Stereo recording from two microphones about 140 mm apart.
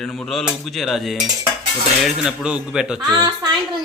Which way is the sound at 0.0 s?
5° left (ahead or behind).